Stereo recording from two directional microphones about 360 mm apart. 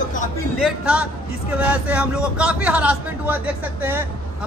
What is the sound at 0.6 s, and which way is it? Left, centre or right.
Speech, centre.